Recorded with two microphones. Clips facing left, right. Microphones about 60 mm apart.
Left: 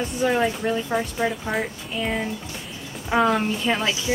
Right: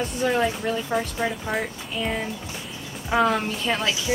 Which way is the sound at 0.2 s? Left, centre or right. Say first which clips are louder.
Left 2 dB; centre.